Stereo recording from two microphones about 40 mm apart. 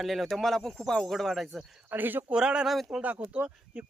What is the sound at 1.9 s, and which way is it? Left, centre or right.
Speech, right.